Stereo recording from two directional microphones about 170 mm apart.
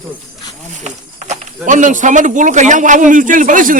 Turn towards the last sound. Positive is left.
turn(degrees=-50)  # may be behind; listen again after turning